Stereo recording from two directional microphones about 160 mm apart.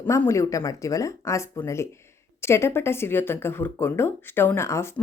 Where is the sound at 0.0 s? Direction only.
15° left (ahead or behind).